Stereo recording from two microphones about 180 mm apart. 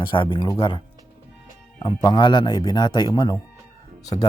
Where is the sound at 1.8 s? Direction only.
25° left (ahead or behind).